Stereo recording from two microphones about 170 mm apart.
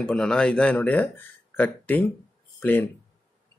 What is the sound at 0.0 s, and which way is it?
Speech, 5° left (ahead or behind).